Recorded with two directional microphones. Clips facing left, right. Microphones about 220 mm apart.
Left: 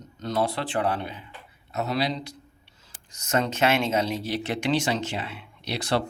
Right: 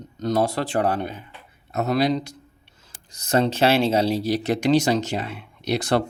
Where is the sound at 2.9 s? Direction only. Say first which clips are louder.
Right 5 dB; 35° right (ahead or behind).